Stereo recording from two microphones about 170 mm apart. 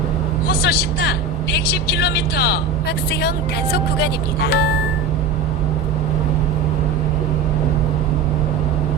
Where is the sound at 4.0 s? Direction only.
75° left (ahead or behind).